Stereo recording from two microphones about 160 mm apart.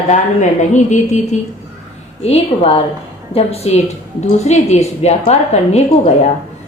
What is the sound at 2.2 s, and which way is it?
A woman's voice, 40° left (ahead or behind).